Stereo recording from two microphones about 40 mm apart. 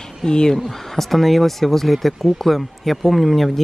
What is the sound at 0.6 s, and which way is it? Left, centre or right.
Speech, centre.